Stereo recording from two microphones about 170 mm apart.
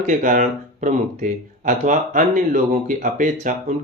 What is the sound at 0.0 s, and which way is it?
Speech, 50° right (ahead or behind).